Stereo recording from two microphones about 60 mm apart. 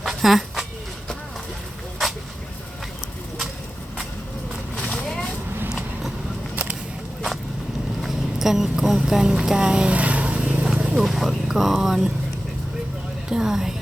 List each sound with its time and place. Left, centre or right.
0.0 s a sound: centre
4.8 s vehicle: centre
8.0 s a sound: centre
9.0 s speech: centre
10.7 s vehicle: centre
11.0 s speech: centre
13.3 s a woman's voice: centre